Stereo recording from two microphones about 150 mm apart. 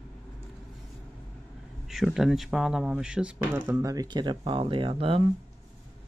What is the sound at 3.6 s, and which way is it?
Speech, 20° right (ahead or behind).